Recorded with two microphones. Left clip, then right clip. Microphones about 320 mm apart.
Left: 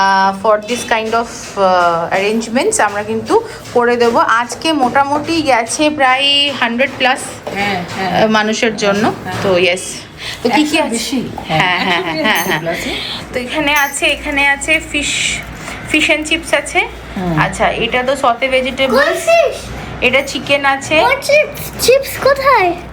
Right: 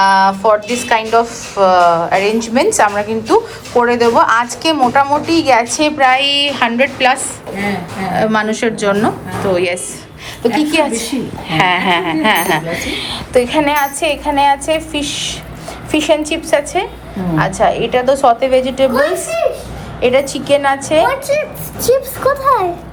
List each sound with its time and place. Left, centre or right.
0.0 s a woman's voice: centre
20.0 s a woman's voice: centre
21.2 s a woman's voice: left